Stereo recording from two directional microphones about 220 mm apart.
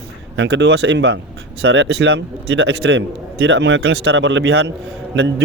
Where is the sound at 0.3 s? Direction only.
55° right (ahead or behind).